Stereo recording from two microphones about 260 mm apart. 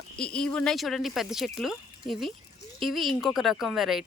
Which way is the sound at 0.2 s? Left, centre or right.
Centre.